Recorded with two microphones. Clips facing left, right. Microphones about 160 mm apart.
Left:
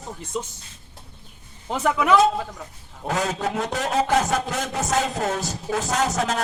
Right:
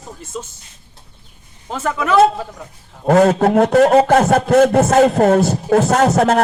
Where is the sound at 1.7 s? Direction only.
15° left (ahead or behind).